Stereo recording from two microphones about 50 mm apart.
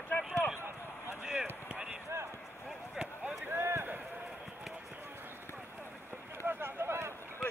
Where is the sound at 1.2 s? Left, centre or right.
Centre.